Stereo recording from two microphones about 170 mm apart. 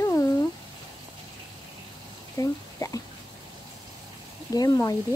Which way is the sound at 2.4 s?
20° left (ahead or behind).